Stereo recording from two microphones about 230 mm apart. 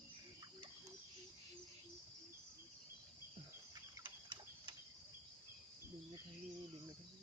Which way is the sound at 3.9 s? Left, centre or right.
Centre.